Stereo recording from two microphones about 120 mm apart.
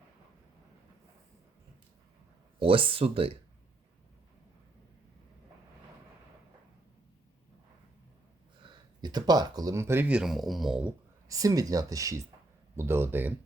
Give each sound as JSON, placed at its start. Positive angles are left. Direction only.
{"t": 2.6, "sound": "speech", "side_deg": -45}
{"t": 8.6, "sound": "speech", "side_deg": -35}
{"t": 11.3, "sound": "speech", "side_deg": -30}